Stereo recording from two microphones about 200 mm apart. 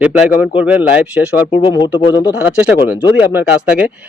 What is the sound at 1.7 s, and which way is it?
Speech, 25° left (ahead or behind).